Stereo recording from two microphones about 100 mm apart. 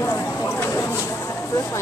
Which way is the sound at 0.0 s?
25° left (ahead or behind).